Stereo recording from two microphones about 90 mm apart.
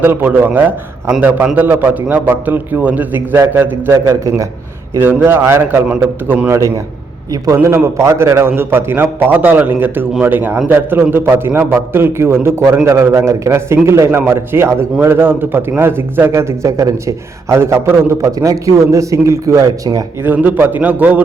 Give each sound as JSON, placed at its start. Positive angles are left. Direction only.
{"t": 0.0, "sound": "a man's voice", "side_deg": -25}
{"t": 7.4, "sound": "a man's voice", "side_deg": -30}
{"t": 20.2, "sound": "a man's voice", "side_deg": -20}